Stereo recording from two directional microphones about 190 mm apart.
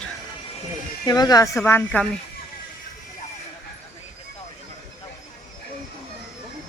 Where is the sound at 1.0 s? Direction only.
20° left (ahead or behind).